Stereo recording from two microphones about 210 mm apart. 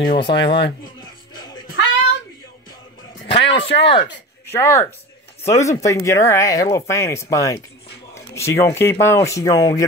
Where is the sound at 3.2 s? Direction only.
55° left (ahead or behind).